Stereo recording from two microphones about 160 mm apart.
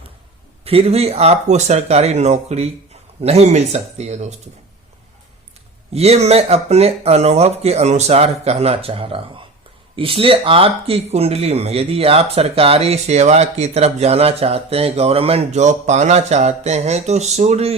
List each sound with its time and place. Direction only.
0.6 s speech: 40° right (ahead or behind)
5.9 s speech: 40° right (ahead or behind)